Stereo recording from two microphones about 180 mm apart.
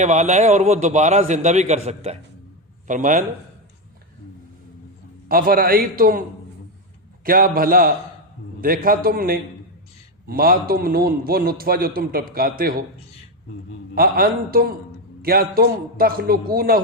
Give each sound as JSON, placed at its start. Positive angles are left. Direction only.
{"t": 0.0, "sound": "a man's voice", "side_deg": -40}
{"t": 5.3, "sound": "a man's voice", "side_deg": -55}
{"t": 7.3, "sound": "a man's voice", "side_deg": -55}
{"t": 13.9, "sound": "a man's voice", "side_deg": -55}